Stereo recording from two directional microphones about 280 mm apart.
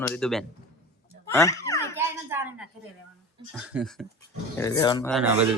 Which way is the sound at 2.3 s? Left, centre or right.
Centre.